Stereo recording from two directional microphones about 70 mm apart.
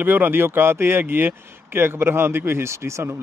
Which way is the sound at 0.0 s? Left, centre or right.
Right.